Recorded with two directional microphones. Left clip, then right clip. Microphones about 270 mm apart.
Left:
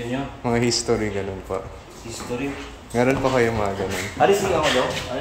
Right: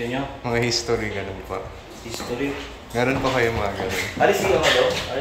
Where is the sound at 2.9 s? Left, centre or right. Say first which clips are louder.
Left 2 dB; left.